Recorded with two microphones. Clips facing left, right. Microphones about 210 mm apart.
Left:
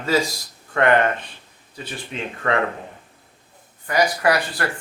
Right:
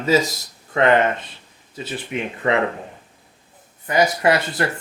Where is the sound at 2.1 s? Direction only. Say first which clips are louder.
Right 3 dB; 20° right (ahead or behind).